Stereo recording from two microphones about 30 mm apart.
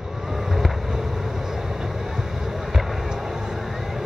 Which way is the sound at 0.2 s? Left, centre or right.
Centre.